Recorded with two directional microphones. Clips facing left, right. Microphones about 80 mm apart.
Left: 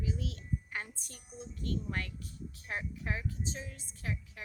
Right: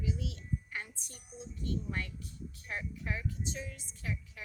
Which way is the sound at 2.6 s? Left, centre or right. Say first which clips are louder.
Left 1 dB; left.